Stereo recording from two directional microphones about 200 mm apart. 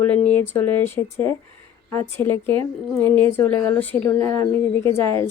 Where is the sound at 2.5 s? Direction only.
25° right (ahead or behind).